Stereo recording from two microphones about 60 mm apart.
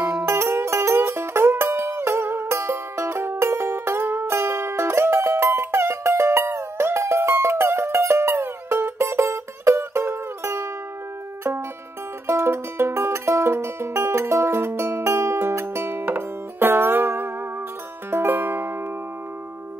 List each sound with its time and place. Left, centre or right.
0.2 s music: right
12.3 s music: right